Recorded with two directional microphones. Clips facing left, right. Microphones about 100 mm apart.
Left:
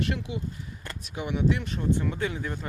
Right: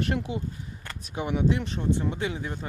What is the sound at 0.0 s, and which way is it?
Speech, 40° right (ahead or behind).